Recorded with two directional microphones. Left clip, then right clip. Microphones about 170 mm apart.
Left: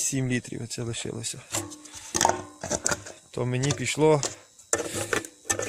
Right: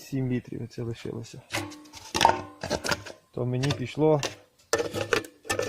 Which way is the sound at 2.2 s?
35° right (ahead or behind).